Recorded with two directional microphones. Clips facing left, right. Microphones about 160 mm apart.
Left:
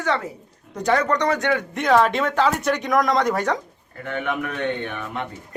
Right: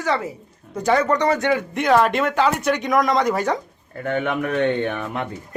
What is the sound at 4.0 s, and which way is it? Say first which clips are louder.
A man's voice: right 4 dB; 50° right (ahead or behind).